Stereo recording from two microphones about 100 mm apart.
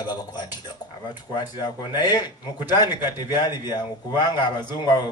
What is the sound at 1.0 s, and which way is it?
Speech, 45° left (ahead or behind).